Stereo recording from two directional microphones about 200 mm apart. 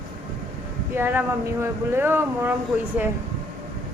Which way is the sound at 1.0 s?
10° right (ahead or behind).